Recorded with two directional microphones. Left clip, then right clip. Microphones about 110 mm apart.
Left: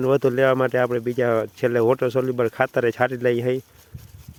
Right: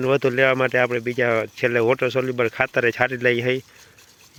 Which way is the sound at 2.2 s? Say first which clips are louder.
Even; 35° left (ahead or behind).